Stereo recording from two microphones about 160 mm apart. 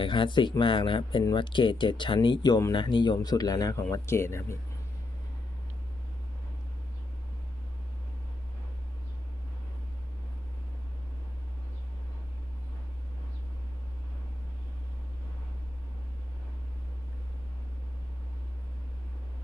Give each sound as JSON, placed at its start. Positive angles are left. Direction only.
{"t": 0.0, "sound": "speech", "side_deg": 30}